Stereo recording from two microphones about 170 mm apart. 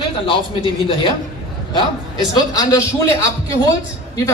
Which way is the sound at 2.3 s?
20° left (ahead or behind).